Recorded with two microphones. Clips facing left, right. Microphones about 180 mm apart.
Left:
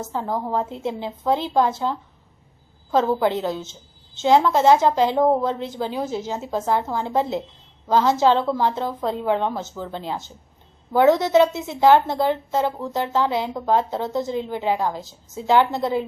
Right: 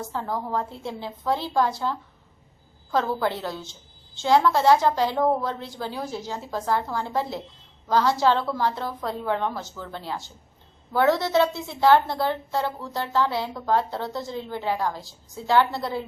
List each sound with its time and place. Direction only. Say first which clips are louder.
0.0 s a woman's voice: left 4 dB; 20° left (ahead or behind)
3.2 s a woman's voice: left 5 dB; 20° left (ahead or behind)